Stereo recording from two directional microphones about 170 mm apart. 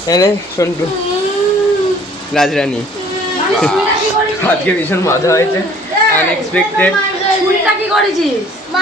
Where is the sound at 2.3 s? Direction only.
Centre (ahead or behind).